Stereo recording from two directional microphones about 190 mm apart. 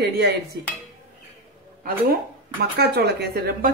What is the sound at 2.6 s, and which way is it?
Speech, 60° right (ahead or behind).